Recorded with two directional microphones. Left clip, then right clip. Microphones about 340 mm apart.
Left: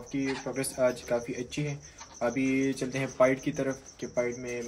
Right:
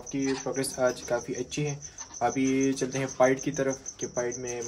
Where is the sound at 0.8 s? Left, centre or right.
Centre.